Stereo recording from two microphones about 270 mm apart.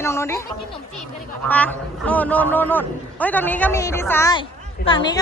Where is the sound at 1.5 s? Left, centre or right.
Centre.